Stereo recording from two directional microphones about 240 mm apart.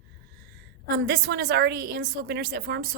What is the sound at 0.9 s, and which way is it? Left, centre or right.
A woman's voice, right.